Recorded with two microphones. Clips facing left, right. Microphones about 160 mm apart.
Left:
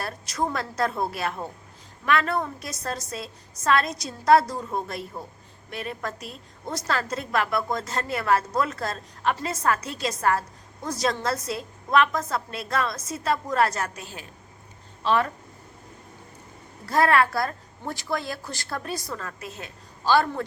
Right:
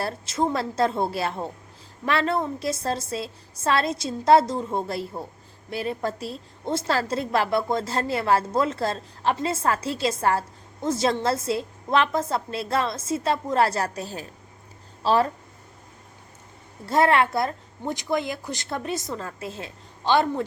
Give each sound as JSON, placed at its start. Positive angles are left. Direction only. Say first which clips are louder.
{"t": 0.0, "sound": "a woman's voice", "louder": "right 3 dB", "side_deg": -25}
{"t": 16.8, "sound": "a woman's voice", "louder": "right 1 dB", "side_deg": -25}